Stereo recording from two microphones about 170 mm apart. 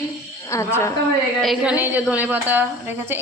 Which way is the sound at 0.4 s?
15° left (ahead or behind).